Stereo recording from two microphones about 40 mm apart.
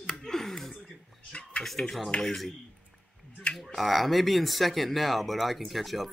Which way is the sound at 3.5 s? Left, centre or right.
Centre.